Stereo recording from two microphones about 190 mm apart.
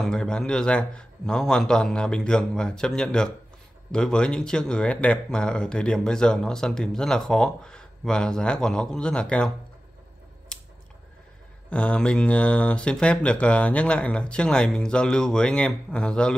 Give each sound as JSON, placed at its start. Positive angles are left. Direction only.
{"t": 0.0, "sound": "speech", "side_deg": 5}
{"t": 10.5, "sound": "scissors", "side_deg": 5}
{"t": 11.7, "sound": "speech", "side_deg": 5}